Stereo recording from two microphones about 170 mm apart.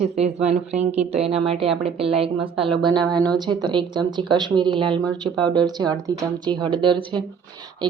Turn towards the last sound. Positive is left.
turn(degrees=-30)  # may be behind; listen again after turning